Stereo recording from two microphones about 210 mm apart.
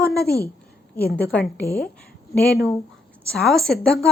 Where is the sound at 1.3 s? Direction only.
5° left (ahead or behind).